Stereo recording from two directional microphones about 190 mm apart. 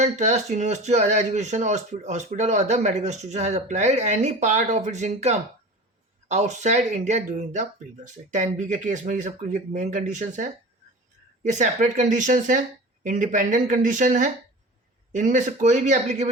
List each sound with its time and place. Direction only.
0.0 s speech: 35° right (ahead or behind)